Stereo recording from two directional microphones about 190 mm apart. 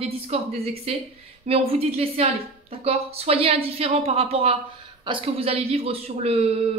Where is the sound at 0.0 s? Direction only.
35° right (ahead or behind).